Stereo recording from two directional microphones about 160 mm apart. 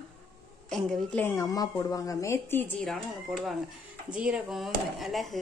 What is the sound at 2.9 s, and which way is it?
Speech, 5° right (ahead or behind).